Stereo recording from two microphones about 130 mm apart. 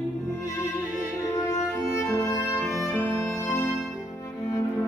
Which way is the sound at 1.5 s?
25° left (ahead or behind).